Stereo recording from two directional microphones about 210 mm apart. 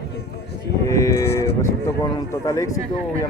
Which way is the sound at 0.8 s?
15° left (ahead or behind).